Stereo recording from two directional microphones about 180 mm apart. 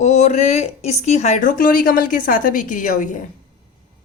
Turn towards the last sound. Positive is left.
turn(degrees=45)  # may be behind; listen again after turning